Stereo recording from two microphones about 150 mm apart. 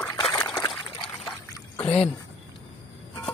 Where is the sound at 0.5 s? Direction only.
25° left (ahead or behind).